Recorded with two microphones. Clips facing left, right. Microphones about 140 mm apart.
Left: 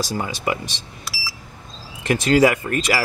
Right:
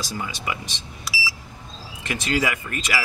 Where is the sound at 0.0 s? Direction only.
45° left (ahead or behind).